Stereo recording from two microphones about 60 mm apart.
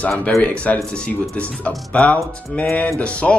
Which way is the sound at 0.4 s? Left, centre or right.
Left.